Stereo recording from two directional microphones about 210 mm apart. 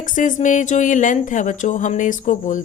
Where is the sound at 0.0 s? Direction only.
35° left (ahead or behind).